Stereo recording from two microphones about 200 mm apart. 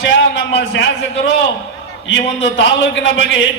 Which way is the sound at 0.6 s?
55° left (ahead or behind).